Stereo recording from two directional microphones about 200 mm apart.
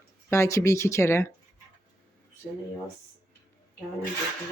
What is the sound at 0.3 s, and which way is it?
Speech, 15° left (ahead or behind).